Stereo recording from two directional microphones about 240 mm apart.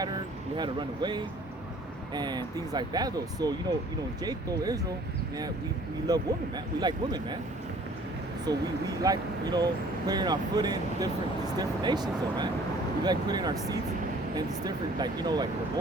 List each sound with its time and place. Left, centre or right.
0.5 s speech: centre
6.1 s speech: centre
8.5 s speech: centre